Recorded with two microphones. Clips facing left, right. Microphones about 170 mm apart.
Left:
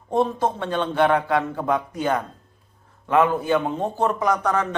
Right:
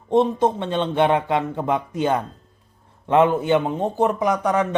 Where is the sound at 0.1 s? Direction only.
20° right (ahead or behind).